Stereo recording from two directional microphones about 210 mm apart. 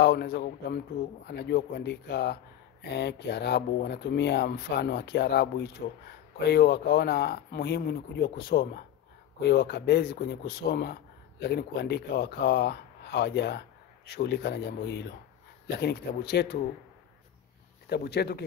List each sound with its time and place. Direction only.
0.0 s speech: 50° left (ahead or behind)
17.8 s speech: 50° left (ahead or behind)